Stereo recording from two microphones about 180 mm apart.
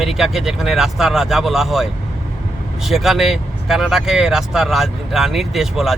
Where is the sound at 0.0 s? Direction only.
Centre (ahead or behind).